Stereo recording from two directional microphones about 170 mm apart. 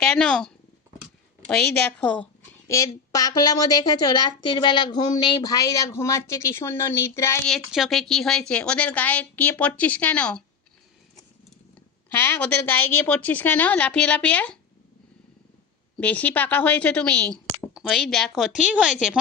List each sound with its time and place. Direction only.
0.0 s a woman's voice: 5° left (ahead or behind)
2.6 s a woman's voice: 20° left (ahead or behind)
7.4 s a woman's voice: centre (ahead or behind)
12.0 s a woman's voice: 10° left (ahead or behind)
16.0 s a woman's voice: 10° left (ahead or behind)